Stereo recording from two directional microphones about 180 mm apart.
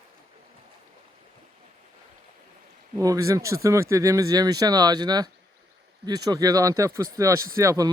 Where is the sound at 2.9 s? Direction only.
20° right (ahead or behind).